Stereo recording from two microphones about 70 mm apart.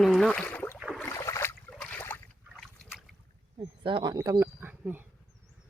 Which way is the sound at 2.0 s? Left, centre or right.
Left.